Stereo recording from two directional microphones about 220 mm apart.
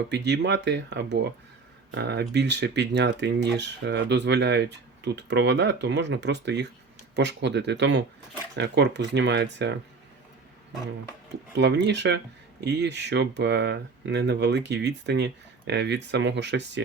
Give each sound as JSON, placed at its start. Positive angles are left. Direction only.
{"t": 0.1, "sound": "speech", "side_deg": -50}
{"t": 11.5, "sound": "speech", "side_deg": -50}